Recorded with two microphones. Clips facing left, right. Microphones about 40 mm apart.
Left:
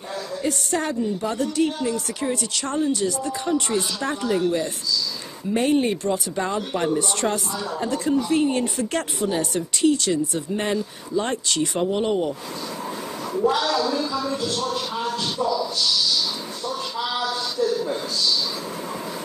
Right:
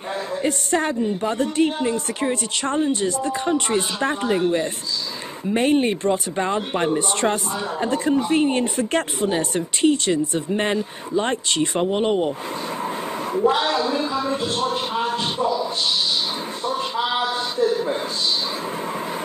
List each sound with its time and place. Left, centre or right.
0.4 s speech: right
13.4 s speech: right
16.6 s a sound: right